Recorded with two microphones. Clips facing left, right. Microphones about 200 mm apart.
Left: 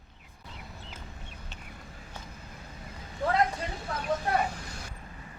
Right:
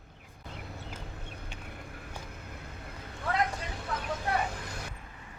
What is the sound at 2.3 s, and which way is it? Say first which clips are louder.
Vehicle: right 2 dB; 60° right (ahead or behind).